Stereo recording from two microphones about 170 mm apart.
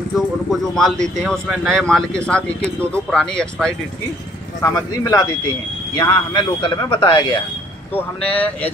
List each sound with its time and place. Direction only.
0.5 s speech: centre (ahead or behind)
4.6 s speech: 20° left (ahead or behind)
7.9 s speech: 10° left (ahead or behind)